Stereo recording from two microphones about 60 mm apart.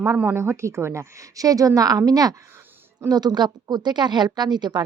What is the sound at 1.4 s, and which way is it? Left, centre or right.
A woman's voice, right.